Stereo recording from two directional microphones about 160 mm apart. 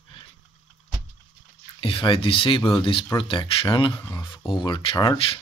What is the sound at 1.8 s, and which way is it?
Speech, 35° left (ahead or behind).